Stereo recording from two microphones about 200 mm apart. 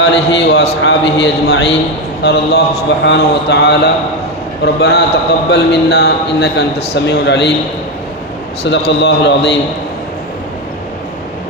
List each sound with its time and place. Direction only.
0.0 s a man's voice: 60° left (ahead or behind)
8.9 s a man's voice: 60° left (ahead or behind)